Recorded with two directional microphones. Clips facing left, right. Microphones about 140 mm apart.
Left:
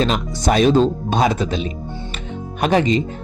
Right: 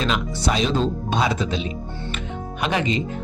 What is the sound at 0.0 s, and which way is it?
A man's voice, 45° left (ahead or behind).